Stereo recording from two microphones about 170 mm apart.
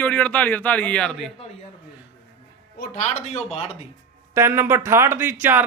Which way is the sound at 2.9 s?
45° left (ahead or behind).